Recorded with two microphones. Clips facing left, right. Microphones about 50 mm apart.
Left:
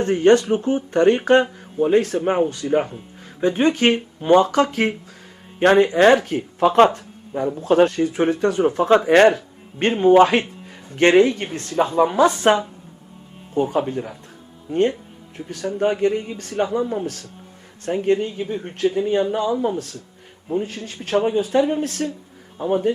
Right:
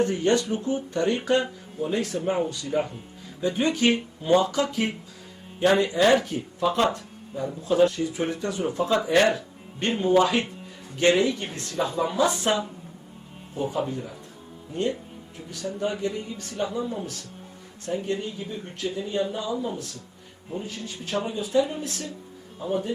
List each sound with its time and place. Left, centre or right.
0.0 s speech: left